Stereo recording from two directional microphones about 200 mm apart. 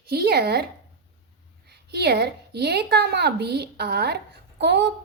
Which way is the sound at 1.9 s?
55° right (ahead or behind).